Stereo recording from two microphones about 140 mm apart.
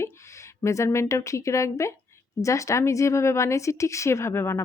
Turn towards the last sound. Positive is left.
turn(degrees=20)  # may be behind; listen again after turning